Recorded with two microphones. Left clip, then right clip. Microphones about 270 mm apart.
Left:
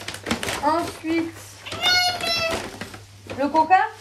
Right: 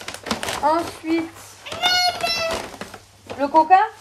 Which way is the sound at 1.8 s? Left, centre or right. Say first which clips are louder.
Right 1 dB; right.